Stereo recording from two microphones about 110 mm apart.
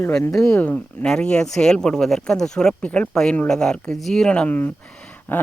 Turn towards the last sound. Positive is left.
turn(degrees=15)  # may be behind; listen again after turning